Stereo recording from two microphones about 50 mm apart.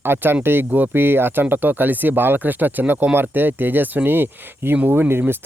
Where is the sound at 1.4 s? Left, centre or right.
Right.